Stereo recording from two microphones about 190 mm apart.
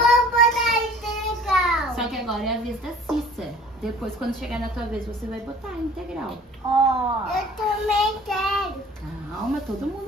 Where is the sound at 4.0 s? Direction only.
Centre (ahead or behind).